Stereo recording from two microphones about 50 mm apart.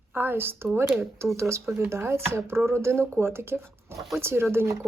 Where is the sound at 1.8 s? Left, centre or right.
Right.